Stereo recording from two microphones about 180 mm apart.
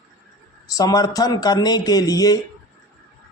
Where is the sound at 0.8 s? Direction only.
20° left (ahead or behind).